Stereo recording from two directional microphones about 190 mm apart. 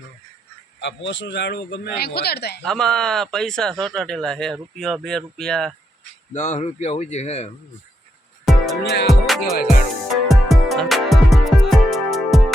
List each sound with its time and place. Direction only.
0.8 s speech: 70° left (ahead or behind)
2.6 s speech: centre (ahead or behind)
6.3 s speech: 35° left (ahead or behind)
8.5 s music: centre (ahead or behind)
8.8 s music: 60° left (ahead or behind)
10.2 s music: centre (ahead or behind)